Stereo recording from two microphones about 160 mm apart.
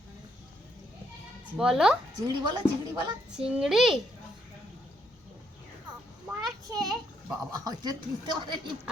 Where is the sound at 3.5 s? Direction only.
5° right (ahead or behind).